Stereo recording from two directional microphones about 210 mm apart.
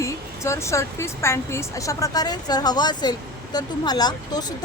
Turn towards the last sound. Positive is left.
turn(degrees=20)  # may be behind; listen again after turning